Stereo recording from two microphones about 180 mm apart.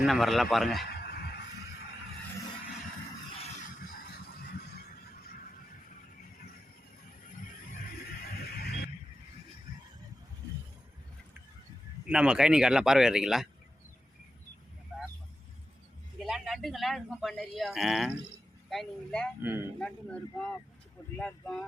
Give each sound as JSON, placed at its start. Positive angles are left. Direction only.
{"t": 0.0, "sound": "speech", "side_deg": 0}
{"t": 0.9, "sound": "a sound", "side_deg": 60}
{"t": 3.4, "sound": "a sound", "side_deg": 40}
{"t": 7.7, "sound": "music", "side_deg": 55}
{"t": 12.0, "sound": "speech", "side_deg": -5}
{"t": 16.2, "sound": "speech", "side_deg": 0}
{"t": 19.4, "sound": "speech", "side_deg": -10}
{"t": 19.8, "sound": "speech", "side_deg": 5}